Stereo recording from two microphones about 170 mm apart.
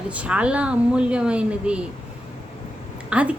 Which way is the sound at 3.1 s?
5° right (ahead or behind).